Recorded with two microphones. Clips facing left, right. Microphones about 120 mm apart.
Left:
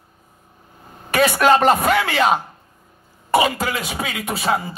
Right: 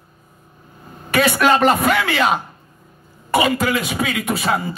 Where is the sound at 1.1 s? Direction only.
40° left (ahead or behind).